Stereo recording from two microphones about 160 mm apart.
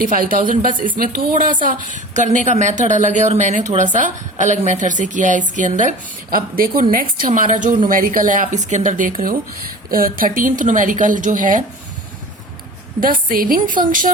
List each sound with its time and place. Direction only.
0.0 s speech: 60° right (ahead or behind)
6.3 s a woman's voice: 60° right (ahead or behind)
13.0 s a woman's voice: 60° right (ahead or behind)